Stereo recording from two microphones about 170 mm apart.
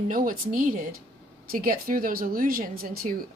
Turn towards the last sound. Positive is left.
turn(degrees=-60)  # may be behind; listen again after turning